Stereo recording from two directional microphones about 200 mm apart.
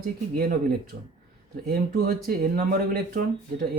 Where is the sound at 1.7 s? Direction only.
50° right (ahead or behind).